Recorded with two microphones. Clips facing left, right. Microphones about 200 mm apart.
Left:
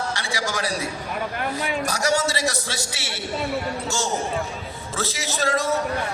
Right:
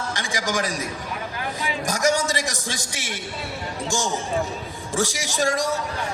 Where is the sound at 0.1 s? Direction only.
15° right (ahead or behind).